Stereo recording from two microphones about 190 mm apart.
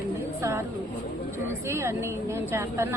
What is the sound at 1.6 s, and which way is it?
A woman's voice, 15° right (ahead or behind).